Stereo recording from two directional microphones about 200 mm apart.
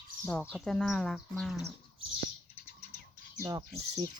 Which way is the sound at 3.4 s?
15° right (ahead or behind).